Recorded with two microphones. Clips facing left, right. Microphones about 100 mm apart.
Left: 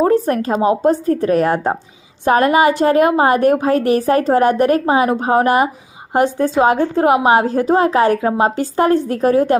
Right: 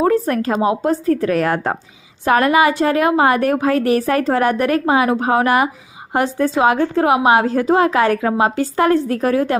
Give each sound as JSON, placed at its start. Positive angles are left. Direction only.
{"t": 0.0, "sound": "a woman's voice", "side_deg": 35}
{"t": 1.5, "sound": "speech", "side_deg": 15}
{"t": 2.2, "sound": "a woman's voice", "side_deg": 35}